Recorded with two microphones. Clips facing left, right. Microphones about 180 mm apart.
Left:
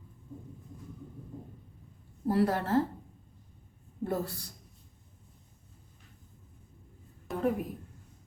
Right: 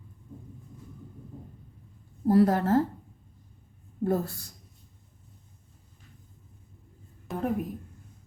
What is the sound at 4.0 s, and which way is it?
Speech, 45° right (ahead or behind).